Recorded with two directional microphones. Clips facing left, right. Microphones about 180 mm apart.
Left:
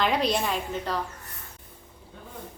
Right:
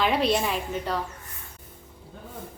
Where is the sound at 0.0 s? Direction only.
5° right (ahead or behind).